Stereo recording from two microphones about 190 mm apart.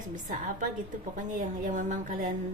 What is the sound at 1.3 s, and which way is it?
Speech, 40° right (ahead or behind).